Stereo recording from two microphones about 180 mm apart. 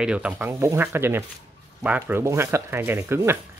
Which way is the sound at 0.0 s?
5° right (ahead or behind).